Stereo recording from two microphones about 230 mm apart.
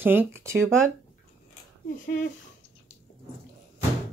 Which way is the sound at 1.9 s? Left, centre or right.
Left.